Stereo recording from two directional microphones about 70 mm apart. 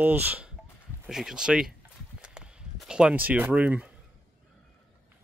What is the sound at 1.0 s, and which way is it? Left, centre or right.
Speech, centre.